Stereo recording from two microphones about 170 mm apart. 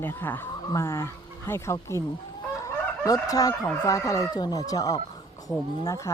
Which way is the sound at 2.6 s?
20° left (ahead or behind).